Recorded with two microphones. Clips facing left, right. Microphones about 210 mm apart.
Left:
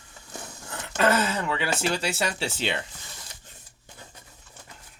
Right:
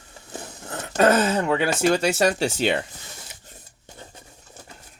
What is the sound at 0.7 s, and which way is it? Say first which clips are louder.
Speech: right 5 dB; 40° right (ahead or behind).